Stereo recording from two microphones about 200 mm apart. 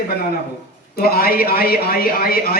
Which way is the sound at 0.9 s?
50° left (ahead or behind).